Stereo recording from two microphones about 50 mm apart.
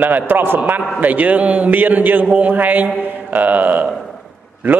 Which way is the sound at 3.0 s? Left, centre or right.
Right.